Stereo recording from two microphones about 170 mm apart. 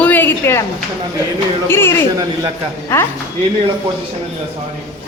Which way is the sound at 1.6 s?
15° left (ahead or behind).